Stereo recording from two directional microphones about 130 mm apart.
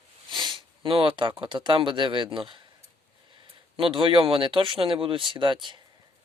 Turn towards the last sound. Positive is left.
turn(degrees=-40)  # may be behind; listen again after turning